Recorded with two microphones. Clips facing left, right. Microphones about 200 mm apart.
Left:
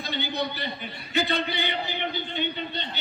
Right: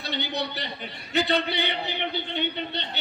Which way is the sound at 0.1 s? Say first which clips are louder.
Even; 70° right (ahead or behind).